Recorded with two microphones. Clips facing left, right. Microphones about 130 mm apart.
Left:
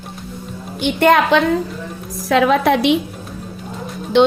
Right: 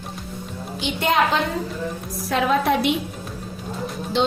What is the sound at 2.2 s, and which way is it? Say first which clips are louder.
Speech: left 6 dB; 90° left.